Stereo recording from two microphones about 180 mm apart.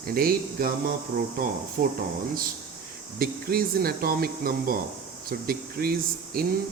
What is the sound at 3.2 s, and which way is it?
Speech, 55° right (ahead or behind).